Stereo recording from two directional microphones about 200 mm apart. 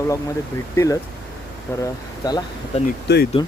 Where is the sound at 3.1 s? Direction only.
55° left (ahead or behind).